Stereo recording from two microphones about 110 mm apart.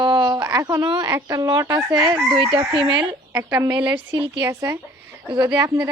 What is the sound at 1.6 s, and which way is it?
Chicken, 45° right (ahead or behind).